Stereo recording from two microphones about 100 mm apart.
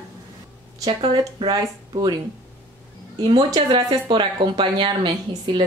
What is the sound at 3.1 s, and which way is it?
Speech, 50° right (ahead or behind).